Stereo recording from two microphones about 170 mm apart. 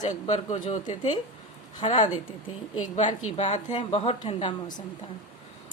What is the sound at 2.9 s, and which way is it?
A woman's voice, 45° left (ahead or behind).